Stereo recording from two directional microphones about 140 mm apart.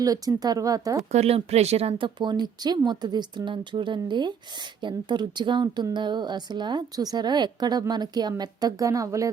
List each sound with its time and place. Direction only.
0.0 s speech: 25° right (ahead or behind)
1.1 s speech: 50° right (ahead or behind); by 9.3 s 25° right (ahead or behind)